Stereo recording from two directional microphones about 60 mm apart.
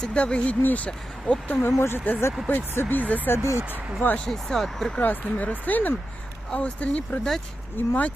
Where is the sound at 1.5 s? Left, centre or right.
Left.